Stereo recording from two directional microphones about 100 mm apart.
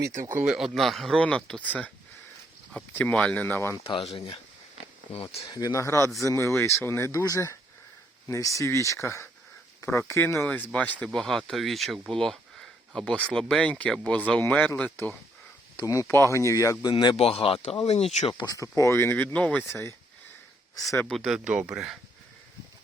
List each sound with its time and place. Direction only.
0.0 s speech: 25° right (ahead or behind)
0.4 s speech: 5° right (ahead or behind)
2.9 s speech: 15° left (ahead or behind)
3.8 s speech: 65° left (ahead or behind)
5.1 s speech: 90° left
5.5 s speech: 40° left (ahead or behind)
10.4 s speech: 15° left (ahead or behind)
11.0 s speech: 5° left (ahead or behind)
15.8 s speech: 35° left (ahead or behind)
16.9 s speech: 50° left (ahead or behind)
17.2 s speech: 75° left (ahead or behind); by 18.3 s 90° left
18.4 s speech: 35° left (ahead or behind); by 19.6 s 15° left (ahead or behind)
19.6 s speech: 25° left (ahead or behind)
21.1 s speech: centre (ahead or behind)